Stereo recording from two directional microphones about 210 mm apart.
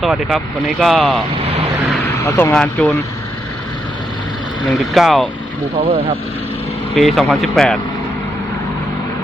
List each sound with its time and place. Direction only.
0.0 s speech: centre (ahead or behind)
2.1 s speech: 15° left (ahead or behind)
4.7 s speech: centre (ahead or behind)
5.8 s speech: 25° right (ahead or behind)
6.9 s speech: centre (ahead or behind)